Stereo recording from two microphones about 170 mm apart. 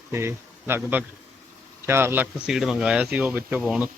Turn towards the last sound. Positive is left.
turn(degrees=-5)  # may be behind; listen again after turning